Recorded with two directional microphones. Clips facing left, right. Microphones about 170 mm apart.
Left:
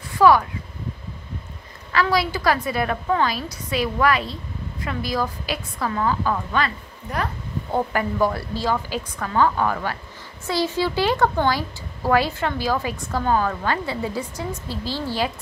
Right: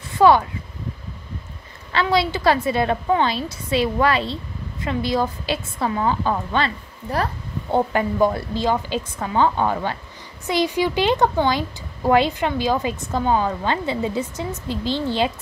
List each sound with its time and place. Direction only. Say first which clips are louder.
0.2 s a woman's voice: right 1 dB; 25° right (ahead or behind)
1.9 s a woman's voice: right 1 dB; 25° right (ahead or behind)